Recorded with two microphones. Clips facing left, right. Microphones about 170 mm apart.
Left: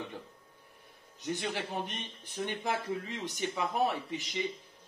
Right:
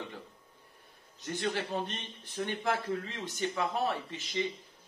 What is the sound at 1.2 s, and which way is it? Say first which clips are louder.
A man's voice: right 1 dB; 15° left (ahead or behind).